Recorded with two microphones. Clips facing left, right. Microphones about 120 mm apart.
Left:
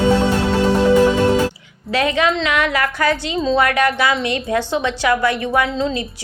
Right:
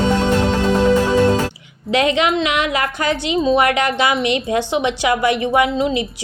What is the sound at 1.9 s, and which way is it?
A woman's voice, 20° right (ahead or behind).